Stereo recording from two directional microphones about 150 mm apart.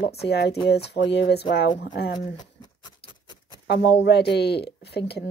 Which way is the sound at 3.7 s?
90° left.